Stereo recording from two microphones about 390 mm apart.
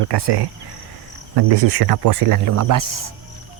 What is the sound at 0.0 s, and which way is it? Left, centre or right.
Speech, right.